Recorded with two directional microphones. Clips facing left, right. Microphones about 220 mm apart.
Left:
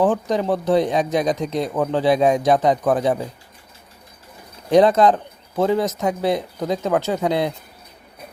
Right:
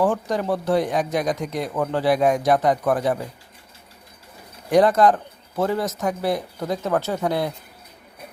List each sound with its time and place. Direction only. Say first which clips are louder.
0.0 s speech: left 3 dB; 20° left (ahead or behind)
4.7 s speech: left 2 dB; 20° left (ahead or behind)